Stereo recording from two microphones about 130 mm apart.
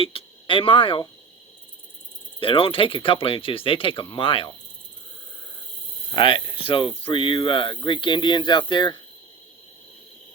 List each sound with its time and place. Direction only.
0.0 s speech: 45° left (ahead or behind)
2.4 s speech: 40° left (ahead or behind)
6.1 s speech: 40° left (ahead or behind)